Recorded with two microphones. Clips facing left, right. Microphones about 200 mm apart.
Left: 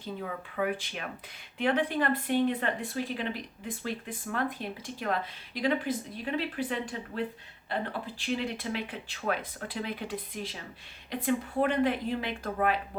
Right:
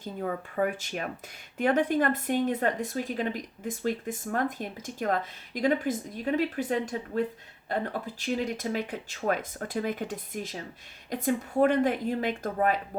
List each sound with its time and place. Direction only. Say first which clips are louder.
0.0 s a woman's voice: right 4 dB; 45° right (ahead or behind)